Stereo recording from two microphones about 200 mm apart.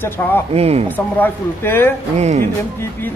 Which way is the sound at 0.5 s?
30° right (ahead or behind).